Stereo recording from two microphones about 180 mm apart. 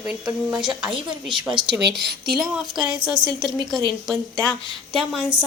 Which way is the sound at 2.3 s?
Centre (ahead or behind).